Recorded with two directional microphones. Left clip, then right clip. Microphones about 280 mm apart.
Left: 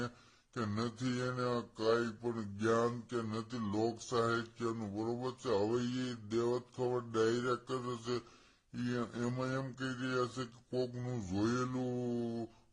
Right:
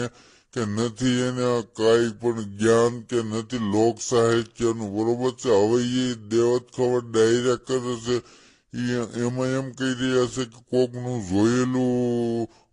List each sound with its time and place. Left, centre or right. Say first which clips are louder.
0.5 s speech: right 12 dB; right